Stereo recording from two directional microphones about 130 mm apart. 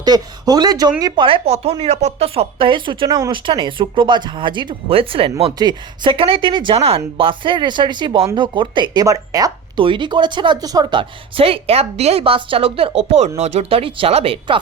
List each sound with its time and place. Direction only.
0.0 s speech: 30° right (ahead or behind)
1.5 s speech: 55° right (ahead or behind)
5.5 s speech: 35° right (ahead or behind)
11.3 s a woman's voice: 45° right (ahead or behind)